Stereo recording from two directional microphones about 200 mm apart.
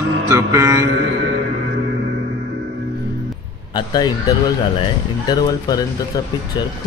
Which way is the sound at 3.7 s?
20° left (ahead or behind).